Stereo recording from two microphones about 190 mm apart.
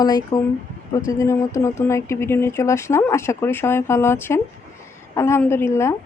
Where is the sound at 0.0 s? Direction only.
20° left (ahead or behind).